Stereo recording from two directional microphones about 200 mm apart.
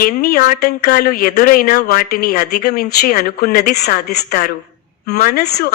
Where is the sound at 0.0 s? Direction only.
50° left (ahead or behind).